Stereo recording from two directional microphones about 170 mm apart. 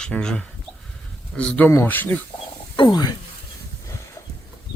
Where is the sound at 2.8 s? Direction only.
25° left (ahead or behind).